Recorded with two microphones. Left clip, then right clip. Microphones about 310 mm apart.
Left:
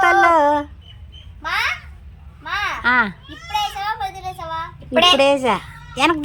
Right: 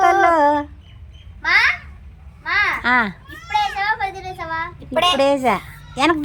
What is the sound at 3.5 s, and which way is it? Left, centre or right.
Child singing, left.